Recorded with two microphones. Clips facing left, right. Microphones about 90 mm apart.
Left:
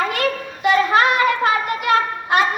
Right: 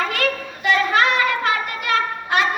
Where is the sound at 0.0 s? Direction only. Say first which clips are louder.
Left 2 dB; 40° left (ahead or behind).